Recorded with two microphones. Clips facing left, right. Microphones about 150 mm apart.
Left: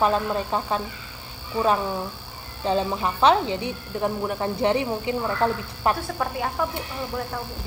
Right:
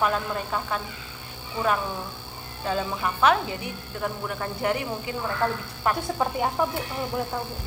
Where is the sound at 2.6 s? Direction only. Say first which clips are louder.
Left 4 dB; 25° left (ahead or behind).